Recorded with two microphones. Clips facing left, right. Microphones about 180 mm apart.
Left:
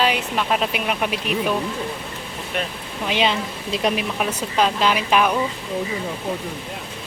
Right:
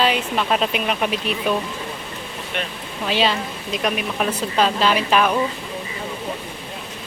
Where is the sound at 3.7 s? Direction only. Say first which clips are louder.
Left 2 dB; 30° left (ahead or behind).